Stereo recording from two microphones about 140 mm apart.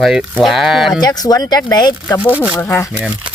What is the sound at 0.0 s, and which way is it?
Speech, 5° right (ahead or behind).